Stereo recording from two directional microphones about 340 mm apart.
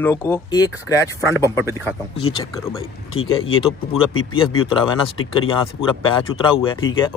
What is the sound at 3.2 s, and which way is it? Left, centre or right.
Speech, left.